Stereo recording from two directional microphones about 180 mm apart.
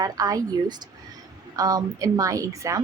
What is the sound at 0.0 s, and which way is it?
A woman's voice, 20° right (ahead or behind).